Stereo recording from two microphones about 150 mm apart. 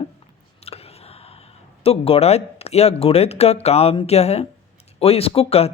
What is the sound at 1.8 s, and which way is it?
Speech, 40° left (ahead or behind).